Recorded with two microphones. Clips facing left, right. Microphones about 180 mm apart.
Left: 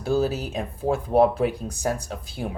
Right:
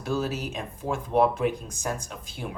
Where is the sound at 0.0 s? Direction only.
35° left (ahead or behind).